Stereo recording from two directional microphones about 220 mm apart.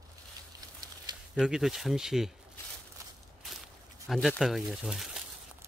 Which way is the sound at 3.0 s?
15° right (ahead or behind).